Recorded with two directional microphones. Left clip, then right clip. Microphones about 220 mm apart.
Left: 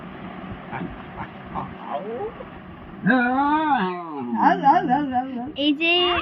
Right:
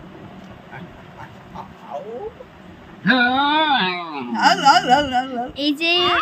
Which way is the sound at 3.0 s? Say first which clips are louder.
Right 3 dB; 25° right (ahead or behind).